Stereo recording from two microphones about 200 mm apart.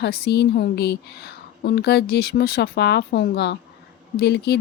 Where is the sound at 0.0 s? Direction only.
55° left (ahead or behind).